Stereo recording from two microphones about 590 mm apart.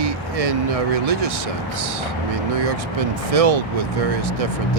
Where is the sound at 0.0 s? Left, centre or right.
Right.